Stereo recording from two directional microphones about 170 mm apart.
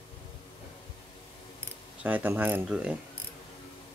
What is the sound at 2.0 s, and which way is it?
Speech, 10° right (ahead or behind).